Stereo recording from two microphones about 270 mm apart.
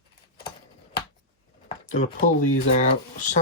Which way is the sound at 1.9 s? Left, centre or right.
Left.